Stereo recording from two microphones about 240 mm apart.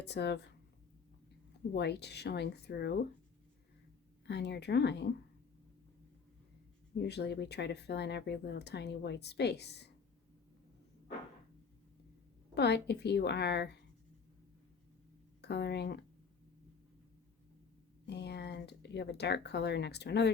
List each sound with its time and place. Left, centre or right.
0.0 s speech: left
1.7 s speech: left
4.3 s speech: left
7.0 s speech: left
12.5 s speech: left
15.4 s speech: left
18.0 s speech: left